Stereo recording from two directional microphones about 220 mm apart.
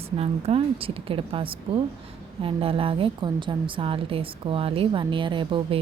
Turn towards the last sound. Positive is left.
turn(degrees=-25)  # may be behind; listen again after turning